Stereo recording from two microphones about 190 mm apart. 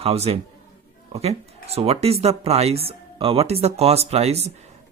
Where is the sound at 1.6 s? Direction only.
30° right (ahead or behind).